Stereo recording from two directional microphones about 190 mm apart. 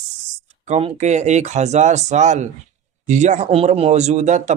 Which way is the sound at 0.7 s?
35° right (ahead or behind).